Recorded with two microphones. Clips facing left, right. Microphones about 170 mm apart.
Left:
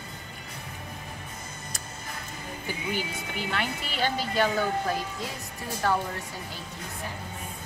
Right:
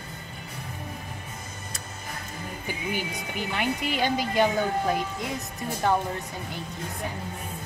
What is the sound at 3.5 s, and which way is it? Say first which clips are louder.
Speech: right 6 dB; 15° right (ahead or behind).